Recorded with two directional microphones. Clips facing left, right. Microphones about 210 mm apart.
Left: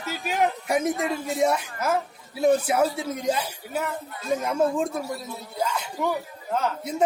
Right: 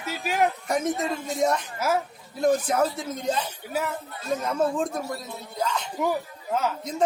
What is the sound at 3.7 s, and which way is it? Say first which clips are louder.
Speech: right 1 dB; centre (ahead or behind).